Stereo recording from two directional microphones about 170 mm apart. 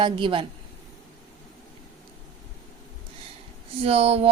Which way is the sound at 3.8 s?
35° right (ahead or behind).